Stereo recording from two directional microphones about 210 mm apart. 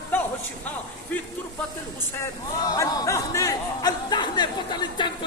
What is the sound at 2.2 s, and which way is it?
Speech, 15° left (ahead or behind).